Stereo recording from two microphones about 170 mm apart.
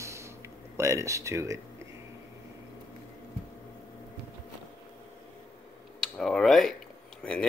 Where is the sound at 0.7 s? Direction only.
15° right (ahead or behind).